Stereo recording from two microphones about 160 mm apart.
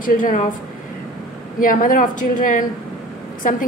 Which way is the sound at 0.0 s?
60° left (ahead or behind).